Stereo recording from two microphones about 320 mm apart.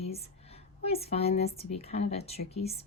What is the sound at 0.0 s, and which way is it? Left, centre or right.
Speech, centre.